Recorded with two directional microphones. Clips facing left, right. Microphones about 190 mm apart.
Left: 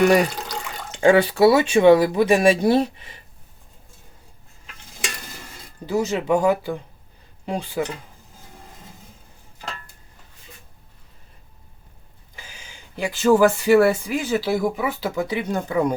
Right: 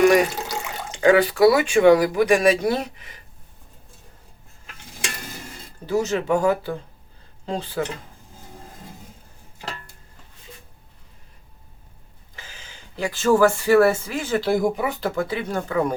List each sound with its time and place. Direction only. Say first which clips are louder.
1.0 s speech: even; 25° left (ahead or behind)
5.8 s speech: even; 15° left (ahead or behind)
12.4 s speech: even; 10° left (ahead or behind)